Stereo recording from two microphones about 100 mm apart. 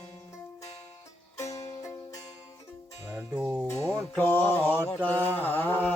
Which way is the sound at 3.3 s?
15° right (ahead or behind).